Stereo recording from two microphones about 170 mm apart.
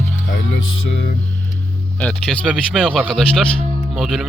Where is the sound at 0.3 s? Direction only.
90° left.